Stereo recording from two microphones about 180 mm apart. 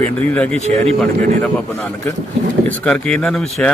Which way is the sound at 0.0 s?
10° left (ahead or behind).